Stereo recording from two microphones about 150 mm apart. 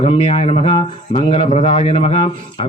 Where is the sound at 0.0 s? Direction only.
45° left (ahead or behind).